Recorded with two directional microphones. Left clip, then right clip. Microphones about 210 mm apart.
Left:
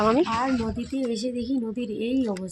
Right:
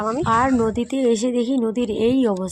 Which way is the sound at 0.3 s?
45° right (ahead or behind).